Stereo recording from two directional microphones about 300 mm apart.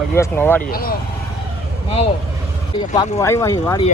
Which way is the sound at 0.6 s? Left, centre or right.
Left.